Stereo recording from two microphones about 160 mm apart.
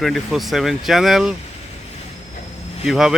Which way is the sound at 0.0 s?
Centre (ahead or behind).